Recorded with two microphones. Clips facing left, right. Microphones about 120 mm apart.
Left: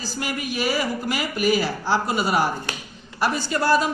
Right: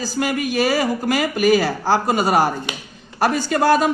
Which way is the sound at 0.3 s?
90° right.